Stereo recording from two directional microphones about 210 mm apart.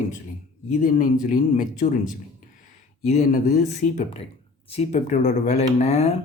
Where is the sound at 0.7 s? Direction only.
40° left (ahead or behind).